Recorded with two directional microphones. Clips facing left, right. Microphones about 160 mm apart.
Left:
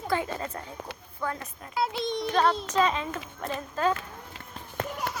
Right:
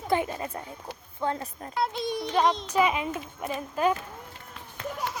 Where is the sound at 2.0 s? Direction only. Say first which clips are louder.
Even; 10° right (ahead or behind).